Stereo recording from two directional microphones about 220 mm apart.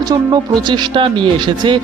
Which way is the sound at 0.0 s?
20° right (ahead or behind).